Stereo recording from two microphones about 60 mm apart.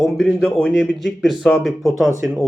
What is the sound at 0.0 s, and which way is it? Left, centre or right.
Speech, centre.